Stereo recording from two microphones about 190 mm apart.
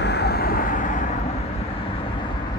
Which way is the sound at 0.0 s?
60° left (ahead or behind).